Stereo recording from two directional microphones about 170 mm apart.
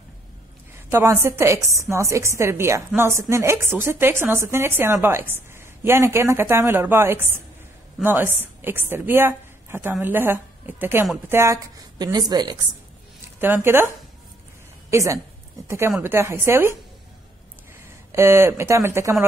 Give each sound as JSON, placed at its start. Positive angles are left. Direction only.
{"t": 0.8, "sound": "a woman's voice", "side_deg": -15}
{"t": 13.4, "sound": "a woman's voice", "side_deg": -10}
{"t": 18.1, "sound": "a woman's voice", "side_deg": -15}